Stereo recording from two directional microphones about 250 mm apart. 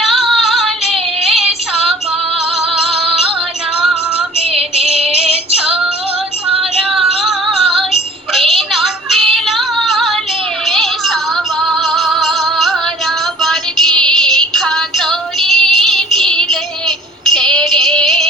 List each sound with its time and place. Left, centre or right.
0.0 s female singing: centre
2.8 s music: centre
4.8 s synthetic singing: right
5.5 s female singing: centre
6.6 s music: centre
9.3 s female singing: centre
10.7 s music: centre
17.3 s female singing: centre